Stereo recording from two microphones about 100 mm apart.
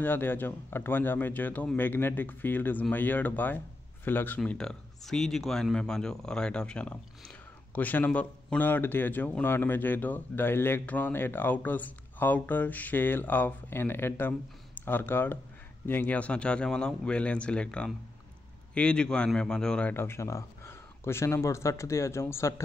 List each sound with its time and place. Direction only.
0.0 s speech: 20° left (ahead or behind)
4.5 s speech: 5° left (ahead or behind)
19.9 s speech: 25° left (ahead or behind)